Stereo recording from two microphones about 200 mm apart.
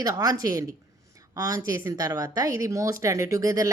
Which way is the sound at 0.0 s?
20° right (ahead or behind).